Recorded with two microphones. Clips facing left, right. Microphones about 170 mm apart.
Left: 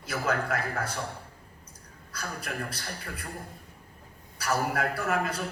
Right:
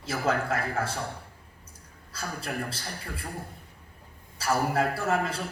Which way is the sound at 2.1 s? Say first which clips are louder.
Right 2 dB; 25° right (ahead or behind).